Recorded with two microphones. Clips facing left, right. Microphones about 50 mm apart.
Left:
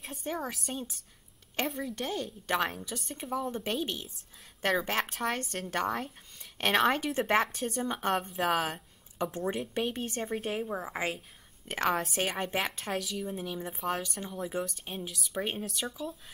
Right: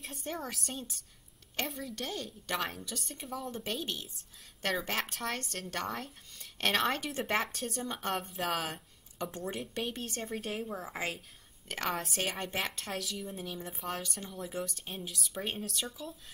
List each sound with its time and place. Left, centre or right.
0.0 s a woman's voice: centre
11.8 s a woman's voice: centre